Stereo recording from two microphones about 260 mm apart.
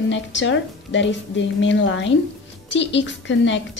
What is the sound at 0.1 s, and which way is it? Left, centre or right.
A woman's voice, left.